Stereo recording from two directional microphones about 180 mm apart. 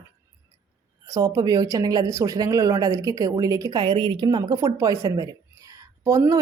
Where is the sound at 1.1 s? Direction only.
20° right (ahead or behind).